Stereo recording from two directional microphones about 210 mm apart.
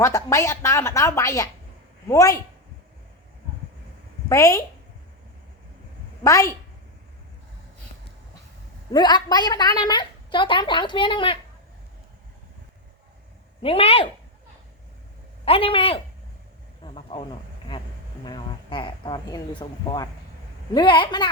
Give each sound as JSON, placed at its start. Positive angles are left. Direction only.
{"t": 0.0, "sound": "speech", "side_deg": 15}
{"t": 4.3, "sound": "speech", "side_deg": 15}
{"t": 6.2, "sound": "speech", "side_deg": 15}
{"t": 8.9, "sound": "a woman's voice", "side_deg": 20}
{"t": 13.6, "sound": "a woman's voice", "side_deg": 25}
{"t": 15.4, "sound": "a woman's voice", "side_deg": 25}
{"t": 16.8, "sound": "a sound", "side_deg": 25}
{"t": 18.3, "sound": "a woman's voice", "side_deg": 20}